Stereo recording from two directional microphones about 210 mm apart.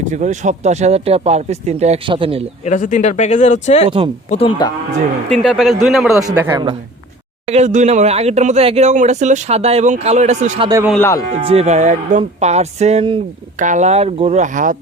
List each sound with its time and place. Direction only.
0.0 s speech: 35° right (ahead or behind)
2.6 s speech: 35° left (ahead or behind)
3.8 s speech: 25° right (ahead or behind)
4.3 s speech: 25° left (ahead or behind)
5.3 s speech: centre (ahead or behind)
6.2 s a man's voice: 10° right (ahead or behind)
7.4 s speech: 30° right (ahead or behind)